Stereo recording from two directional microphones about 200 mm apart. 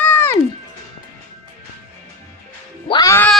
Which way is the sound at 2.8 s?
20° left (ahead or behind).